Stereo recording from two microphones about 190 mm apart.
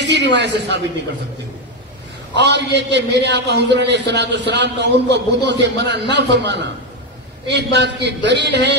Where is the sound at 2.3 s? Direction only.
65° right (ahead or behind).